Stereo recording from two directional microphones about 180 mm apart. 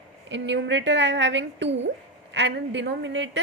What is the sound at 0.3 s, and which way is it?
A woman's voice, 80° right.